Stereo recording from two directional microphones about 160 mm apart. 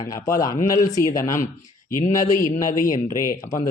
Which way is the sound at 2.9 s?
20° left (ahead or behind).